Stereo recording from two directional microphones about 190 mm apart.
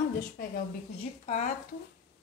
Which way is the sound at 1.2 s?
40° left (ahead or behind).